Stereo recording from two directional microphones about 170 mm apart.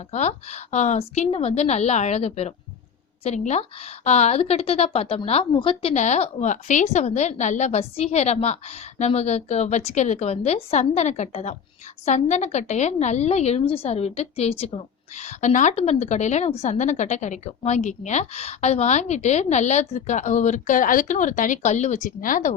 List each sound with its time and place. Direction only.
0.1 s a woman's voice: 40° left (ahead or behind)